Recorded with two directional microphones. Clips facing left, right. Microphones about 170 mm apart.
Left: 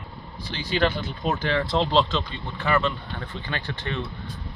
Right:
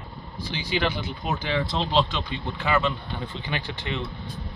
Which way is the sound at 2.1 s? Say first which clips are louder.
Left 1 dB; 15° right (ahead or behind).